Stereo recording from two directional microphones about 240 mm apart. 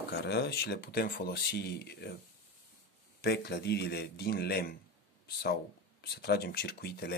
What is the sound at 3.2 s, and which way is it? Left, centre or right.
Speech, left.